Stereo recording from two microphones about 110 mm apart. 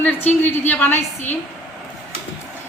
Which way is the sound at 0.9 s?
90° left.